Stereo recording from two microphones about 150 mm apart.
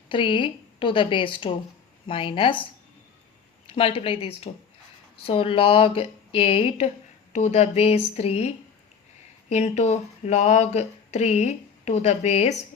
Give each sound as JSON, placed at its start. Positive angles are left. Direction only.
{"t": 0.1, "sound": "speech", "side_deg": 35}
{"t": 3.7, "sound": "speech", "side_deg": 40}